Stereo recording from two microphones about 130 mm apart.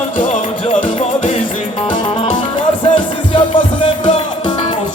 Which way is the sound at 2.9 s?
40° left (ahead or behind).